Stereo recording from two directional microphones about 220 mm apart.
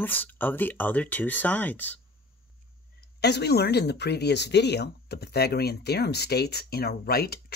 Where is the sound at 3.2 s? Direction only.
50° left (ahead or behind).